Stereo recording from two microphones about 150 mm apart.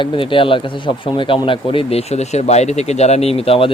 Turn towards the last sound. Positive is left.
turn(degrees=40)  # may be behind; listen again after turning